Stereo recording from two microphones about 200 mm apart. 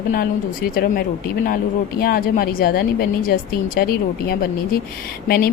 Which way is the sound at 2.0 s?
50° left (ahead or behind).